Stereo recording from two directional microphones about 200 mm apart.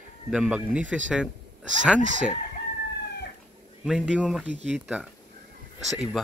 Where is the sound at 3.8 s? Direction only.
5° right (ahead or behind).